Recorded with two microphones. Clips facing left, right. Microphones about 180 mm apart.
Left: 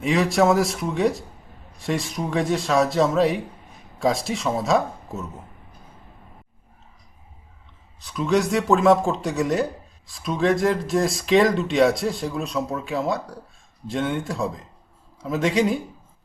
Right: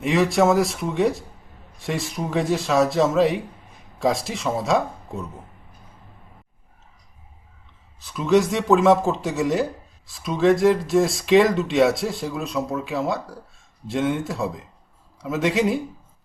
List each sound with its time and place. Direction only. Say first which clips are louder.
0.0 s speech: right 1 dB; centre (ahead or behind)
7.9 s speech: right 3 dB; centre (ahead or behind)